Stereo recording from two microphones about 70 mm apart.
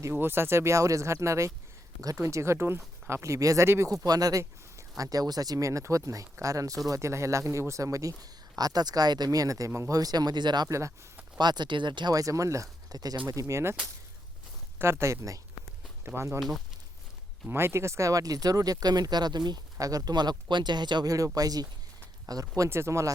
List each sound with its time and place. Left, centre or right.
0.1 s speech: right
2.0 s speech: right
2.2 s speech: right
4.0 s speech: right
10.0 s speech: right
10.7 s speech: right
11.3 s speech: right
12.1 s speech: right
12.9 s speech: right
14.8 s speech: right
17.5 s speech: right
19.8 s speech: right
21.3 s speech: right
22.7 s speech: right